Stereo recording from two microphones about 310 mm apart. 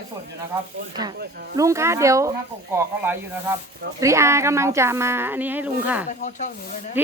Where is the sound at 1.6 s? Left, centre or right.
Centre.